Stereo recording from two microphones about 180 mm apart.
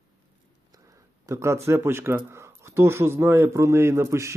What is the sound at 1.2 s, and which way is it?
Speech, 15° right (ahead or behind).